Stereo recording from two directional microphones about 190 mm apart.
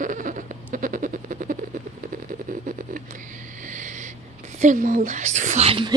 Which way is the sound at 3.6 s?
40° right (ahead or behind).